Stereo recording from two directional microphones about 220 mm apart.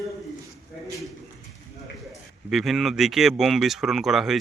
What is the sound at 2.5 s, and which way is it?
Speech, centre (ahead or behind).